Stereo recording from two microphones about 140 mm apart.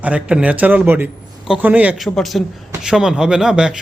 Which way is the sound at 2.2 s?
Centre (ahead or behind).